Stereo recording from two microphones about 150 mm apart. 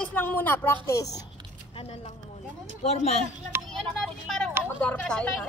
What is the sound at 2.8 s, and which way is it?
Speech, 45° left (ahead or behind).